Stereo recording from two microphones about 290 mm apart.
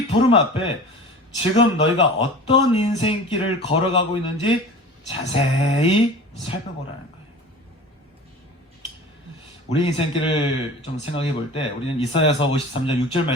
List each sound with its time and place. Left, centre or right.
0.1 s speech: centre
9.6 s speech: centre